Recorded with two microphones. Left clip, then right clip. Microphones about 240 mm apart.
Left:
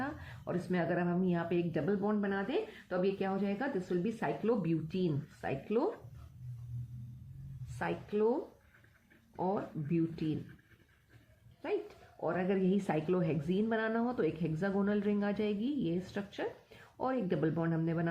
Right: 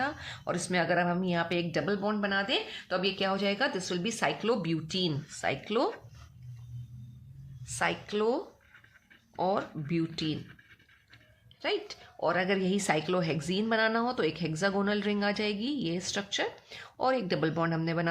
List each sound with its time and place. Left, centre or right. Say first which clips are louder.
0.0 s a woman's voice: right 8 dB; right
7.8 s a woman's voice: right 4 dB; right
11.6 s a woman's voice: right 5 dB; right